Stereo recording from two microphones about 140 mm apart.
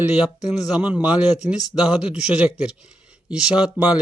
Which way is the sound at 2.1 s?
10° right (ahead or behind).